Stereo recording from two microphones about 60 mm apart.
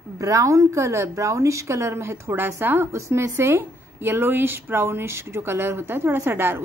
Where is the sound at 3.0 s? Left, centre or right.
Right.